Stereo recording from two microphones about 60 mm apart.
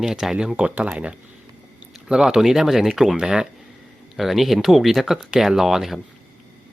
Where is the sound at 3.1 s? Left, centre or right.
Centre.